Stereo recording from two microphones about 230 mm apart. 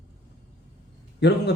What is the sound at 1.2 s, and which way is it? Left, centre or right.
Speech, left.